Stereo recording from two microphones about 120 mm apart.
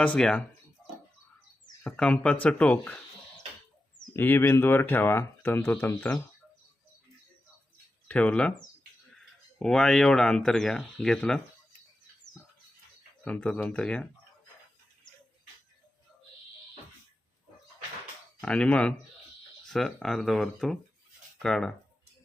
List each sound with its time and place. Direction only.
0.0 s speech: 10° left (ahead or behind)
1.8 s speech: 10° left (ahead or behind)
4.1 s speech: 20° left (ahead or behind)
8.0 s speech: 10° left (ahead or behind)
9.6 s speech: 5° left (ahead or behind)
13.2 s speech: 10° left (ahead or behind)
18.3 s speech: 5° left (ahead or behind)